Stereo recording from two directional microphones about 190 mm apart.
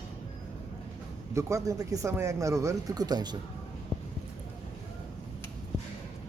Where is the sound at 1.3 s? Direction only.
15° right (ahead or behind).